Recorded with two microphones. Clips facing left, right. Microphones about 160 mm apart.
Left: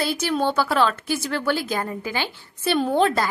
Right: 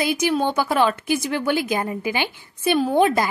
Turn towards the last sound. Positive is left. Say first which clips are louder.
# right 2 dB
turn(degrees=-15)  # may be behind; listen again after turning